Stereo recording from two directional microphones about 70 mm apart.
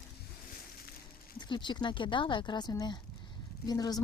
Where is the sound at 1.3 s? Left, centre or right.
Left.